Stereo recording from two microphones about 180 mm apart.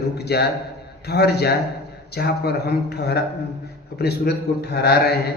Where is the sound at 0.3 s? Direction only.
65° left (ahead or behind).